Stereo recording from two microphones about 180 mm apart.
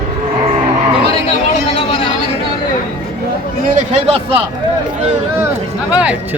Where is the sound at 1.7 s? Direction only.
30° left (ahead or behind).